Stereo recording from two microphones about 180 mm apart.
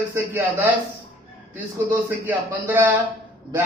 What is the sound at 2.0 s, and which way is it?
Speech, 10° right (ahead or behind).